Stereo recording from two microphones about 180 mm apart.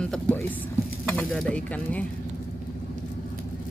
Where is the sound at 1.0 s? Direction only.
5° left (ahead or behind).